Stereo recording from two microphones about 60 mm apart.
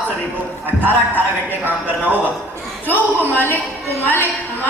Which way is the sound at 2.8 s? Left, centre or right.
Left.